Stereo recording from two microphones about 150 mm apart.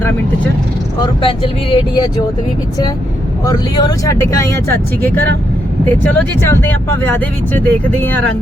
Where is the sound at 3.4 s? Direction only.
25° left (ahead or behind).